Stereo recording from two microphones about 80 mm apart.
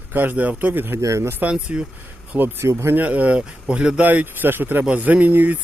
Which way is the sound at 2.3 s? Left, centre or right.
Right.